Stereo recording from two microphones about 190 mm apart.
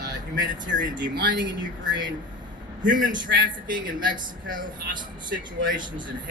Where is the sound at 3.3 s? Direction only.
60° right (ahead or behind).